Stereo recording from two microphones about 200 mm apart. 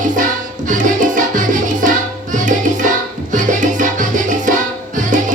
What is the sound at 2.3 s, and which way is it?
Tabla, 40° right (ahead or behind).